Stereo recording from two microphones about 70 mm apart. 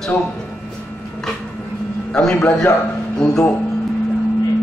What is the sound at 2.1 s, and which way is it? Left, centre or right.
Speech, centre.